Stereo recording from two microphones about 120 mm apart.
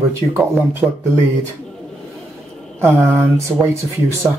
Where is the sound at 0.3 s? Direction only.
15° right (ahead or behind).